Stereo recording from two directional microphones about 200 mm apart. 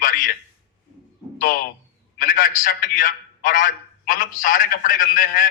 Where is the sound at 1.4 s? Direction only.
45° left (ahead or behind).